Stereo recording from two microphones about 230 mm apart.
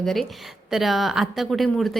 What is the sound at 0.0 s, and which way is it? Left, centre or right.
A woman's voice, centre.